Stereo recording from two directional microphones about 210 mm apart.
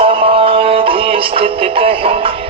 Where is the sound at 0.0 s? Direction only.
25° right (ahead or behind).